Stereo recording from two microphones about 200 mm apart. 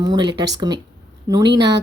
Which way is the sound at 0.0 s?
20° right (ahead or behind).